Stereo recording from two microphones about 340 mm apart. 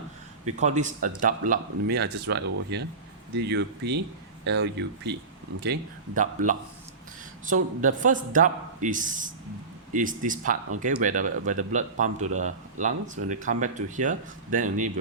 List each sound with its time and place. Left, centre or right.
0.4 s speech: right
6.1 s speech: right